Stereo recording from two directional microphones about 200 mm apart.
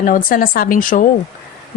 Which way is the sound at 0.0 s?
45° left (ahead or behind).